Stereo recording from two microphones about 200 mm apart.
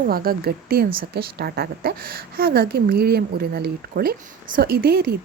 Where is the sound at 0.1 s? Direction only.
50° right (ahead or behind).